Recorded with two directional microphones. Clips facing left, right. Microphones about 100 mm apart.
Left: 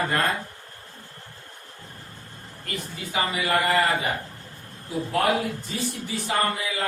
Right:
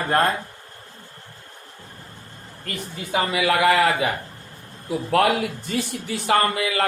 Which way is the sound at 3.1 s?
85° right.